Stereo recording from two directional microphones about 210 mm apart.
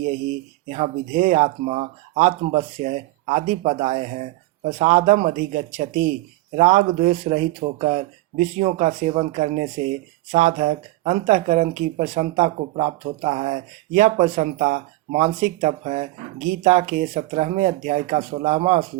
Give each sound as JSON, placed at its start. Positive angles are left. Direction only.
{"t": 0.7, "sound": "speech", "side_deg": -35}